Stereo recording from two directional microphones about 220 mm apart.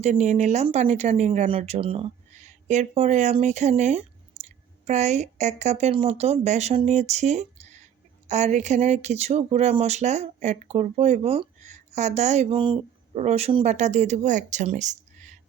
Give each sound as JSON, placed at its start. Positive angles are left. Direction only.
{"t": 0.0, "sound": "speech", "side_deg": -30}